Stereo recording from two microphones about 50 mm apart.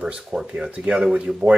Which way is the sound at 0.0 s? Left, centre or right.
Centre.